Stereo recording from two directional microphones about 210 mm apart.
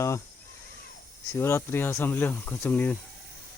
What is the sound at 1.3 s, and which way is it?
Speech, 10° left (ahead or behind).